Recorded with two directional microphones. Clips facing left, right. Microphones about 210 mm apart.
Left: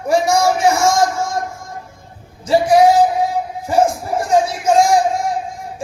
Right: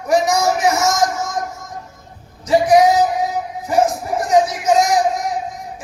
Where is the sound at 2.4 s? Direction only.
30° left (ahead or behind).